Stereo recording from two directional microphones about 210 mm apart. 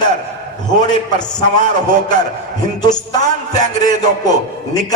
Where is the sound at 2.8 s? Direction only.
20° left (ahead or behind).